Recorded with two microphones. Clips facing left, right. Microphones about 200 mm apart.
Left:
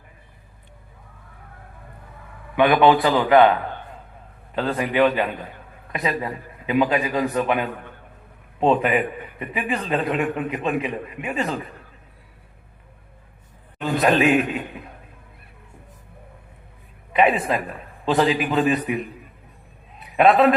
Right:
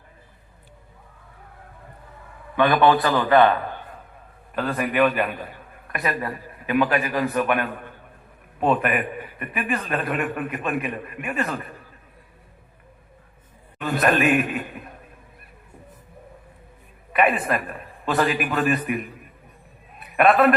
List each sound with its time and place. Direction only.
2.6 s a man's voice: 15° left (ahead or behind)
13.8 s a man's voice: 20° left (ahead or behind)
17.1 s a man's voice: 20° left (ahead or behind)
20.1 s a man's voice: 20° left (ahead or behind)